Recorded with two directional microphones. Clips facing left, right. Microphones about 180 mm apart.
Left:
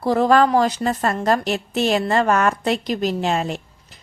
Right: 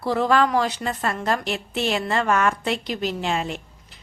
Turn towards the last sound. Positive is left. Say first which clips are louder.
# left 4 dB
turn(degrees=40)  # may be behind; listen again after turning